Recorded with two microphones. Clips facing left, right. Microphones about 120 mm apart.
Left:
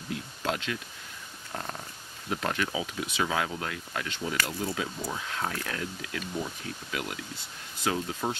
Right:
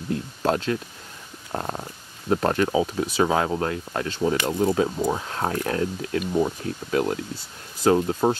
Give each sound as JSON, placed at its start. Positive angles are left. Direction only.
{"t": 0.1, "sound": "speech", "side_deg": -40}